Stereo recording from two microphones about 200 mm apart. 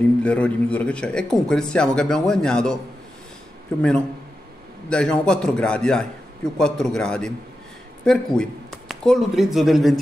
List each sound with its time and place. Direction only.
0.2 s speech: 5° left (ahead or behind)
4.8 s speech: 5° left (ahead or behind)